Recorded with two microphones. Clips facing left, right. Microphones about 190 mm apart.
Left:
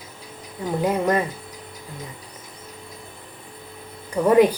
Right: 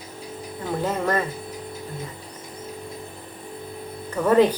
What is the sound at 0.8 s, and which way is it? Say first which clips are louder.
Speech: left 3 dB; 15° left (ahead or behind).